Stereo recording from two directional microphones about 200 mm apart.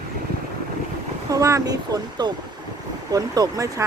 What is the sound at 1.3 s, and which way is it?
Speech, 15° right (ahead or behind).